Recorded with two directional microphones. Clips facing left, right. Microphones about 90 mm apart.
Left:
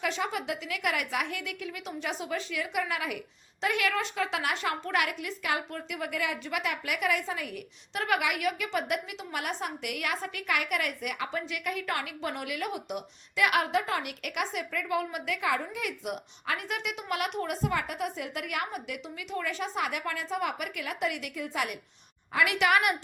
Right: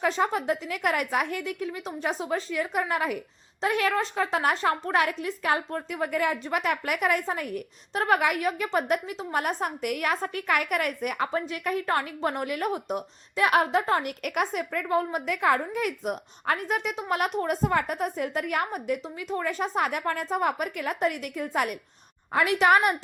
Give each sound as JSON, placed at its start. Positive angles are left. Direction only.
{"t": 0.0, "sound": "a woman's voice", "side_deg": -40}